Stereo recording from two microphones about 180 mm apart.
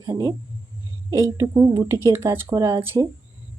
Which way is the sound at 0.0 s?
20° right (ahead or behind).